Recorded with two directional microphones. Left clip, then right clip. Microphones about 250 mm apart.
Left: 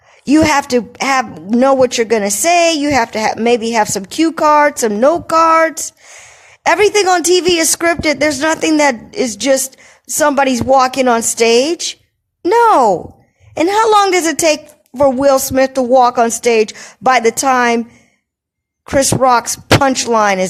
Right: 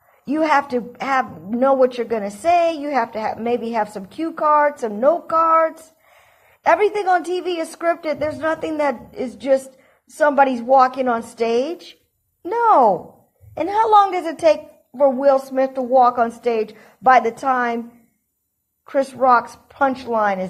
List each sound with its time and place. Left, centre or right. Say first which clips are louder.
0.3 s speech: left 6 dB; left
18.9 s speech: left 5 dB; left